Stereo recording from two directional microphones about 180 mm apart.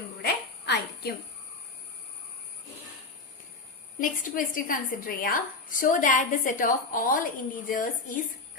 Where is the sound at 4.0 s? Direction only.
50° left (ahead or behind).